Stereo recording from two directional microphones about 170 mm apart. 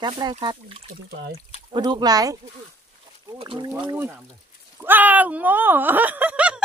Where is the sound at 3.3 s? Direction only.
30° right (ahead or behind).